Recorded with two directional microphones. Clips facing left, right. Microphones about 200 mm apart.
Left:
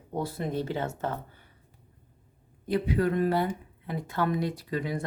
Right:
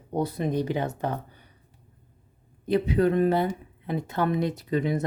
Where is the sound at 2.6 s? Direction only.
25° right (ahead or behind).